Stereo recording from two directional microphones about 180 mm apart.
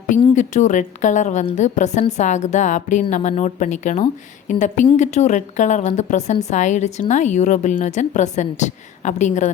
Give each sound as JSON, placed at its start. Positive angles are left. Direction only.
{"t": 0.2, "sound": "a woman's voice", "side_deg": 40}